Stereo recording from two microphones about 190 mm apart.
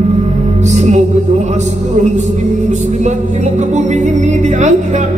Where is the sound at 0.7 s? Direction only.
40° right (ahead or behind).